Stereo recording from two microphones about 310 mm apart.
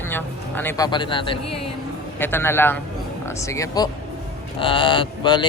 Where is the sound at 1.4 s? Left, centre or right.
Left.